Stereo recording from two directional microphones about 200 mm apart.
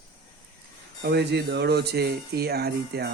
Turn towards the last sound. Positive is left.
turn(degrees=-55)  # may be behind; listen again after turning